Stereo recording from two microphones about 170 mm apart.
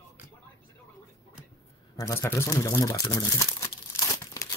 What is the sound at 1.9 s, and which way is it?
Speech, 15° left (ahead or behind).